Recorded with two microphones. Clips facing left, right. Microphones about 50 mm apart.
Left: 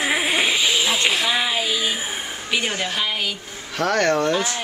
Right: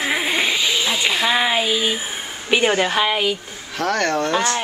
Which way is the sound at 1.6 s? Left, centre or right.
Centre.